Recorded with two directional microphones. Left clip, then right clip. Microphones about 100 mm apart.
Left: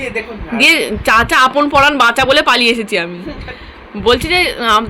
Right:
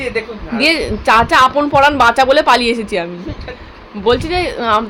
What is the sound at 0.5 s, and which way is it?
Speech, 15° right (ahead or behind).